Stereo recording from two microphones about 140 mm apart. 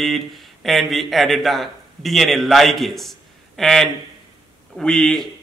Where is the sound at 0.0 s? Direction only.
Centre (ahead or behind).